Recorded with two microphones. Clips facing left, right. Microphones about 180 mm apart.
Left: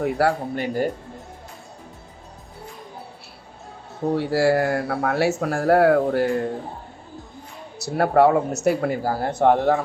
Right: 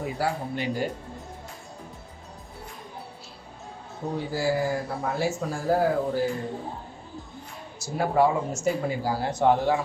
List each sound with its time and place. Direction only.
0.0 s speech: 70° left (ahead or behind); by 0.9 s 50° left (ahead or behind)
4.1 s speech: 70° left (ahead or behind)
7.8 s speech: 65° left (ahead or behind)